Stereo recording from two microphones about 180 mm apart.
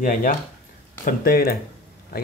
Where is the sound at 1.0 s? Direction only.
55° left (ahead or behind).